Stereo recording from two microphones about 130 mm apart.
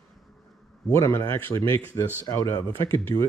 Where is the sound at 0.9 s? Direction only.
20° left (ahead or behind).